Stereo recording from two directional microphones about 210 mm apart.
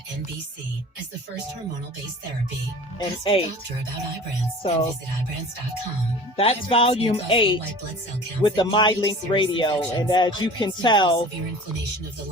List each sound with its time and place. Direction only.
3.0 s speech: 25° left (ahead or behind)
6.3 s speech: 25° left (ahead or behind)